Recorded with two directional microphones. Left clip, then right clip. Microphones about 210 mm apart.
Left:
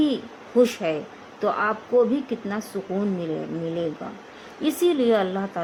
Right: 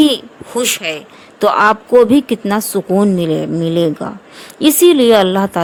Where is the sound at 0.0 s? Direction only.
55° right (ahead or behind).